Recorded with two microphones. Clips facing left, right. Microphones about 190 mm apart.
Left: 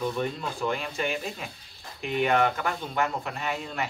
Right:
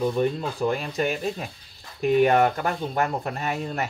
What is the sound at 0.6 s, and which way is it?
Speech, 40° right (ahead or behind).